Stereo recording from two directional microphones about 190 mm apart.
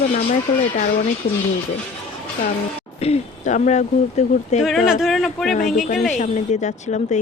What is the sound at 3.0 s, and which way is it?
Speech, 35° left (ahead or behind).